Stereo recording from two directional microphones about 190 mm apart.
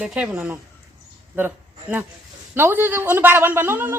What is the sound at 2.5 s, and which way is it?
A man's voice, 10° right (ahead or behind).